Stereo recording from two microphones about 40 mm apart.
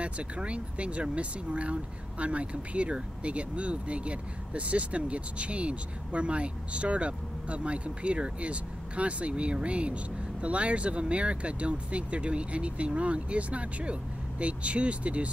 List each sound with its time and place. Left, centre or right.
0.0 s speech: right